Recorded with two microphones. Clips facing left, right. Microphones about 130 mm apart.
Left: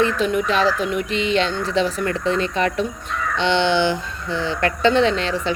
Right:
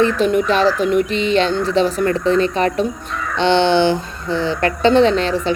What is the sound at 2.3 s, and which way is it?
Speech, 40° right (ahead or behind).